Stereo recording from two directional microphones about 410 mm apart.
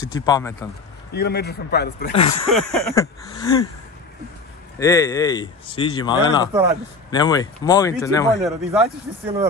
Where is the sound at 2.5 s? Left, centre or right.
Centre.